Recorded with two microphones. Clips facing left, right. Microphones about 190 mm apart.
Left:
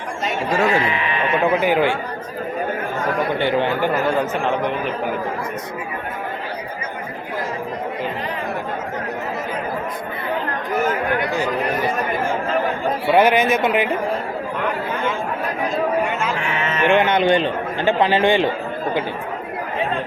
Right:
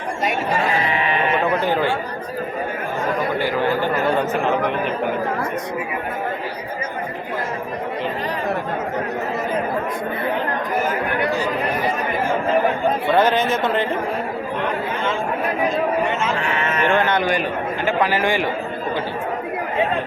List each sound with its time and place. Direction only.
1.6 s speech: 10° left (ahead or behind)
3.3 s speech: 25° left (ahead or behind)
13.1 s speech: 10° left (ahead or behind)
16.6 s speech: 15° left (ahead or behind)